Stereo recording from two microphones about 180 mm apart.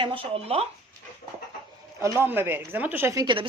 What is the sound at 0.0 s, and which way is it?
Speech, 30° right (ahead or behind).